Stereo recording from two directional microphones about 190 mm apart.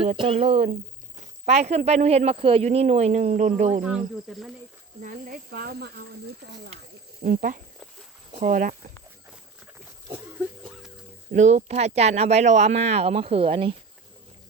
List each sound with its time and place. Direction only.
0.2 s speech: 30° right (ahead or behind)
0.5 s speech: 50° right (ahead or behind)
1.2 s speech: 35° right (ahead or behind)
3.8 s speech: 5° right (ahead or behind)
5.0 s speech: 50° right (ahead or behind)
7.2 s speech: 45° right (ahead or behind)
11.3 s speech: 35° right (ahead or behind)